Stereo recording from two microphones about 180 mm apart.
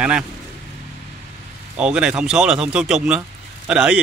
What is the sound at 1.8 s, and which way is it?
Speech, 5° right (ahead or behind).